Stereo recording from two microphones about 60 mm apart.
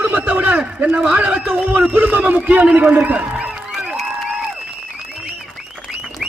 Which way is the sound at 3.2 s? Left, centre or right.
Centre.